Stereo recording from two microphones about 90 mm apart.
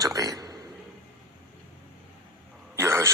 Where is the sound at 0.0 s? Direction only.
40° right (ahead or behind).